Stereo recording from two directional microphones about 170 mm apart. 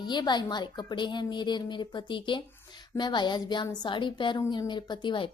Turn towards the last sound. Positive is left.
turn(degrees=30)  # may be behind; listen again after turning